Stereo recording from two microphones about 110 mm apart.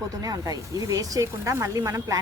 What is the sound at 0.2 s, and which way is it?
Speech, 35° right (ahead or behind).